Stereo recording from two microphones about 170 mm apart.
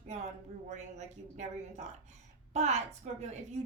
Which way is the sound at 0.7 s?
45° right (ahead or behind).